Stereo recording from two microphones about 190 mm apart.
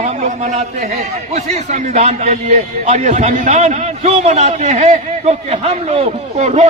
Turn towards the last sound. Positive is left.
turn(degrees=-35)  # may be behind; listen again after turning